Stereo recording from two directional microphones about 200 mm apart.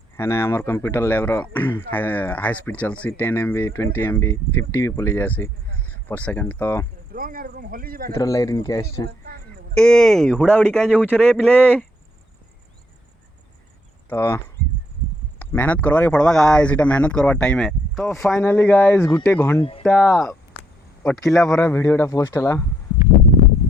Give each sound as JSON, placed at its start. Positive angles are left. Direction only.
{"t": 0.2, "sound": "speech", "side_deg": 15}
{"t": 7.1, "sound": "speech", "side_deg": -45}
{"t": 8.1, "sound": "speech", "side_deg": 15}
{"t": 9.0, "sound": "a sound", "side_deg": -50}
{"t": 9.7, "sound": "speech", "side_deg": 5}
{"t": 10.9, "sound": "speech", "side_deg": -5}
{"t": 11.2, "sound": "speech", "side_deg": 5}
{"t": 14.1, "sound": "speech", "side_deg": 10}
{"t": 19.8, "sound": "speech", "side_deg": 0}